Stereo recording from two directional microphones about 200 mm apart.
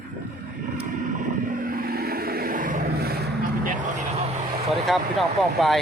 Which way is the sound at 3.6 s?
40° right (ahead or behind).